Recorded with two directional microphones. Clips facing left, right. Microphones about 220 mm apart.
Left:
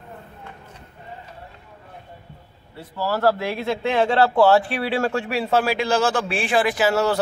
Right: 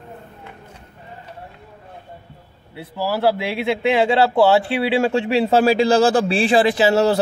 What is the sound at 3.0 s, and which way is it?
A man's voice, 10° right (ahead or behind).